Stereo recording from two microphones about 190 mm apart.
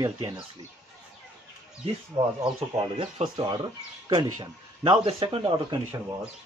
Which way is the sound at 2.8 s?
30° right (ahead or behind).